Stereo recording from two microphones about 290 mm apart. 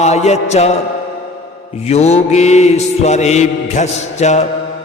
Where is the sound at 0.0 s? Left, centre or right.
Left.